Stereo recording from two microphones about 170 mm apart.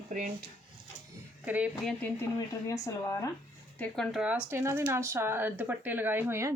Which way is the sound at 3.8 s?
Centre (ahead or behind).